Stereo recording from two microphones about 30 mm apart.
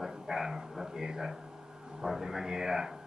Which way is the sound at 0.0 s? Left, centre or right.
Centre.